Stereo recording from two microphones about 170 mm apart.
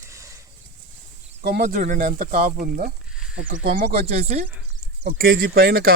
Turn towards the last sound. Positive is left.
turn(degrees=-65)  # may be behind; listen again after turning